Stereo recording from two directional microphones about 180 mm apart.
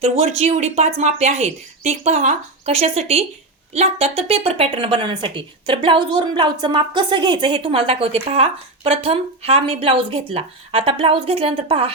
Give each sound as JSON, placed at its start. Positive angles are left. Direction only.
{"t": 0.0, "sound": "speech", "side_deg": -35}